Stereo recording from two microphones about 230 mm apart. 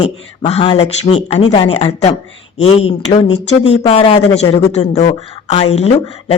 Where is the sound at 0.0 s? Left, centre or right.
Left.